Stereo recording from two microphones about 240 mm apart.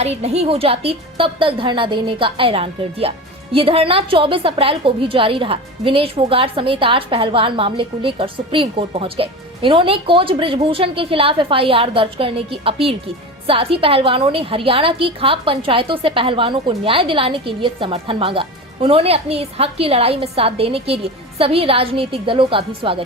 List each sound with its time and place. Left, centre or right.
0.0 s a woman's voice: right